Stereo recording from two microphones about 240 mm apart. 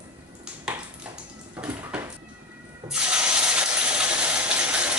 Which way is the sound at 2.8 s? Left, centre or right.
Centre.